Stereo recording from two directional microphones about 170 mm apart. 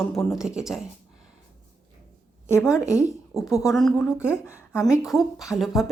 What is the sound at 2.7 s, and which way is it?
Speech, 15° left (ahead or behind).